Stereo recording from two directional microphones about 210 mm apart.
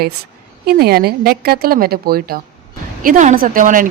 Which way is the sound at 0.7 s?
45° right (ahead or behind).